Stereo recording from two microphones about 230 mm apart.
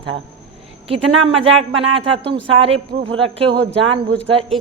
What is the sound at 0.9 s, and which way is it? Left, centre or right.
A woman's voice, right.